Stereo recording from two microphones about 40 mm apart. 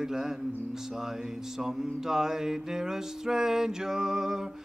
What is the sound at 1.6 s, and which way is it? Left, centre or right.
Mantra, centre.